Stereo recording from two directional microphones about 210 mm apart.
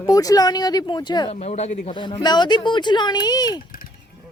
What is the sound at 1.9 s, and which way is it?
Speech, 20° left (ahead or behind).